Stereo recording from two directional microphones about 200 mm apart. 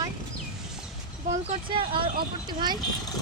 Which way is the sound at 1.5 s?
25° right (ahead or behind).